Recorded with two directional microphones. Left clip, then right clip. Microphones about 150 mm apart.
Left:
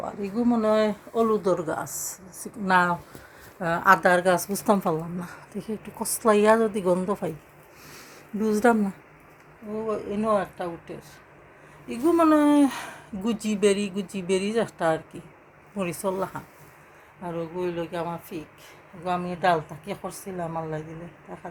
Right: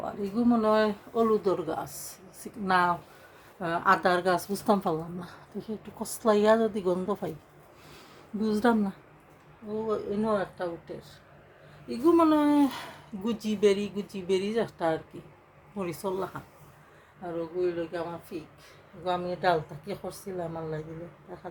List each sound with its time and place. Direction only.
0.0 s a woman's voice: 10° left (ahead or behind)
8.4 s a woman's voice: 5° left (ahead or behind)
17.3 s speech: 25° left (ahead or behind)
19.0 s a woman's voice: 10° left (ahead or behind)